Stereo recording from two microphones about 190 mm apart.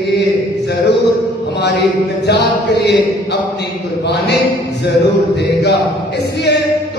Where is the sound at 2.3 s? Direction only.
65° left (ahead or behind).